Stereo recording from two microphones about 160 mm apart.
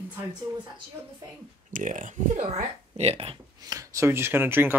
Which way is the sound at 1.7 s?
55° right (ahead or behind).